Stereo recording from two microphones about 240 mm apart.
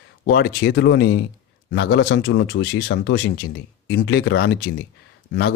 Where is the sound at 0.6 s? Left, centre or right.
Left.